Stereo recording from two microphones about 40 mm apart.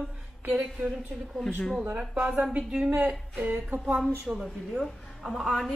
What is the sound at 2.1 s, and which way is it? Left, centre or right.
Speech, right.